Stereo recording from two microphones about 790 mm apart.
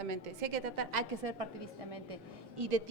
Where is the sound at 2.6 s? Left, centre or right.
Right.